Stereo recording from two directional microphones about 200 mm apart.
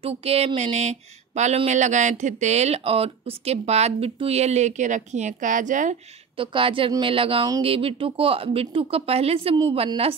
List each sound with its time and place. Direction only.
0.0 s speech: 30° right (ahead or behind)
6.3 s a woman's voice: 25° right (ahead or behind)